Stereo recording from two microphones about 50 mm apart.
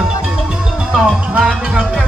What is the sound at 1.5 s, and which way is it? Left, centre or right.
Music, centre.